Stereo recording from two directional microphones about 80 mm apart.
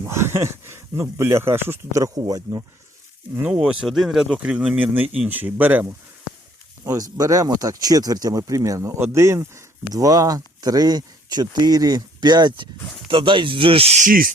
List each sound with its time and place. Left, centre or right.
0.0 s speech: right
1.9 s speech: right
3.5 s speech: centre
6.8 s speech: right
9.9 s speech: right
13.1 s speech: right